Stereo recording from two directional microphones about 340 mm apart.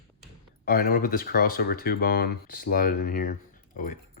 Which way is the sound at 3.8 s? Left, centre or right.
Left.